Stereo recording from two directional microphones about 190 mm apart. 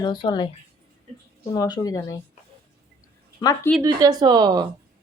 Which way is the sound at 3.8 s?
20° right (ahead or behind).